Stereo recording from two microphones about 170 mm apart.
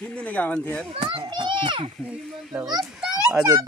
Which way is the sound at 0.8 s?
30° right (ahead or behind).